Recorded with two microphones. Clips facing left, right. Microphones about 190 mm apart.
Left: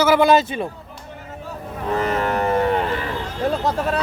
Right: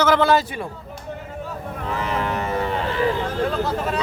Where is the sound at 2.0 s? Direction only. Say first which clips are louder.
Left 4 dB; 55° left (ahead or behind).